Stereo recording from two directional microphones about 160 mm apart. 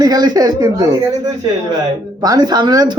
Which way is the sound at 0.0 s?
25° right (ahead or behind).